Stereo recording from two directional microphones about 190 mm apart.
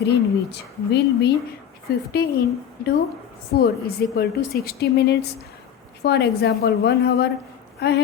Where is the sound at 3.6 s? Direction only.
55° left (ahead or behind).